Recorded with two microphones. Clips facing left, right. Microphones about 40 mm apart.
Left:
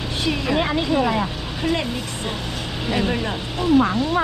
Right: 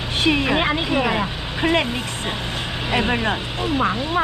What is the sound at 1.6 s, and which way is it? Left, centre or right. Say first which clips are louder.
Speech: right 4 dB; right.